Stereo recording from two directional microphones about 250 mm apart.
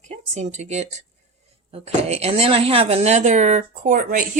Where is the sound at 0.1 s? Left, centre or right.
Right.